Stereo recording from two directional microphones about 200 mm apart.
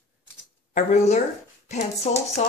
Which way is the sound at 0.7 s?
35° left (ahead or behind).